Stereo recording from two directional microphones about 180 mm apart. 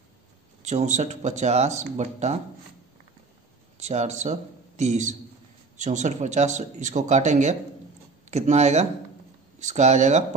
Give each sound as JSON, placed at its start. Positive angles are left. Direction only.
{"t": 0.6, "sound": "speech", "side_deg": -40}
{"t": 3.7, "sound": "speech", "side_deg": -40}